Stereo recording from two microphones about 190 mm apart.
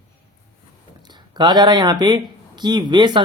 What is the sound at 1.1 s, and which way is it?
Speech, 20° right (ahead or behind).